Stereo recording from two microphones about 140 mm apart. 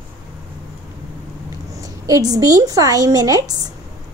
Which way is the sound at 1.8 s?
25° right (ahead or behind).